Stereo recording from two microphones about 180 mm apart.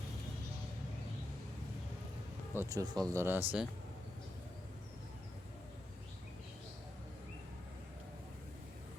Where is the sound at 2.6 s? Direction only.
20° right (ahead or behind).